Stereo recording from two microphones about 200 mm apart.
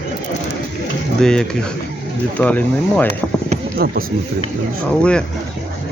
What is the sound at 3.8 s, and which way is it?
Speech, 50° right (ahead or behind).